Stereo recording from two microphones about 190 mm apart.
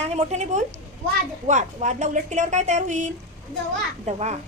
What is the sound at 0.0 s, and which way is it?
A woman's voice, 35° right (ahead or behind).